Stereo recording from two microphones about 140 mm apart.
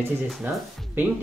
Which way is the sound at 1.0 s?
15° right (ahead or behind).